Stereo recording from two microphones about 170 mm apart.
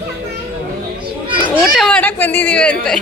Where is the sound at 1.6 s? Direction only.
Centre (ahead or behind).